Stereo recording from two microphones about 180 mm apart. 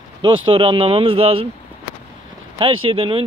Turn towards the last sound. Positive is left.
turn(degrees=-30)  # may be behind; listen again after turning